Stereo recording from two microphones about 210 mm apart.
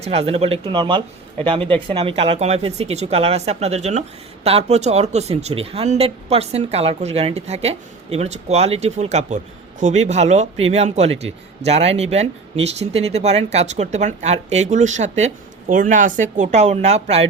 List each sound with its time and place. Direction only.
0.0 s a man's voice: 30° right (ahead or behind)